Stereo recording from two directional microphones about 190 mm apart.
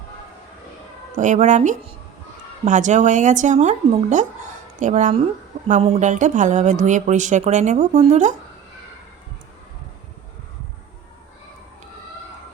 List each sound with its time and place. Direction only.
1.1 s speech: 40° right (ahead or behind)